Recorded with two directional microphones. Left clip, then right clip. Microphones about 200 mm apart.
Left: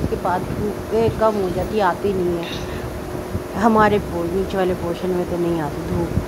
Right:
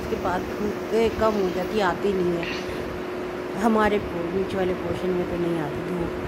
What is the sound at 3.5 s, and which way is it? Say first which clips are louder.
Speech: left 6 dB; 5° left (ahead or behind).